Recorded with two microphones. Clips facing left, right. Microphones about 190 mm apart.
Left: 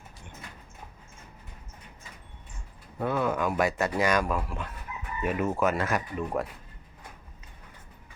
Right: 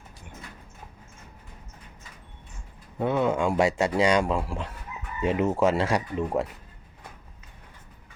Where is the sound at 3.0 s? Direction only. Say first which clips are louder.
Right 3 dB; 25° right (ahead or behind).